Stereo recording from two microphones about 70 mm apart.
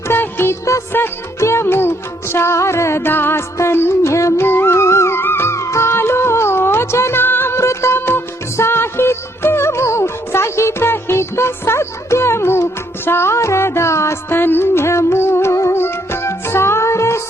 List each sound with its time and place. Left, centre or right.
0.1 s music: left
4.4 s music: left